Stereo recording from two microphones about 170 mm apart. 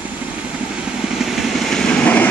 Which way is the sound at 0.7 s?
5° right (ahead or behind).